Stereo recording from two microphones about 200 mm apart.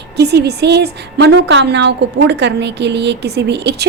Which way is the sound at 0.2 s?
55° right (ahead or behind).